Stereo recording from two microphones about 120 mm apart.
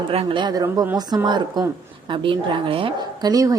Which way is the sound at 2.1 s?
45° right (ahead or behind).